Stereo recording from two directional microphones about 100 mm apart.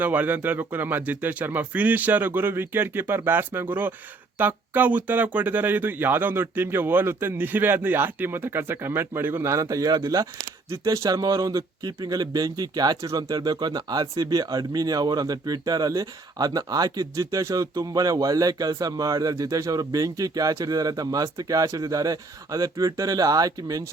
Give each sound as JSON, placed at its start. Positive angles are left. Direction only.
{"t": 0.0, "sound": "speech", "side_deg": -15}